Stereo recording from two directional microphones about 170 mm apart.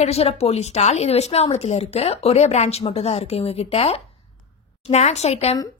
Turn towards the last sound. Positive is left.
turn(degrees=40)  # may be behind; listen again after turning